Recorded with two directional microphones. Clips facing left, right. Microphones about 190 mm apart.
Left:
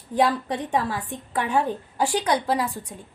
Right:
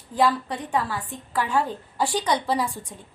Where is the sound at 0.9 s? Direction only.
20° left (ahead or behind).